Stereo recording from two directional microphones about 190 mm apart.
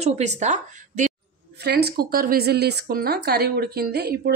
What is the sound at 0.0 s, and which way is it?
Speech, 35° right (ahead or behind).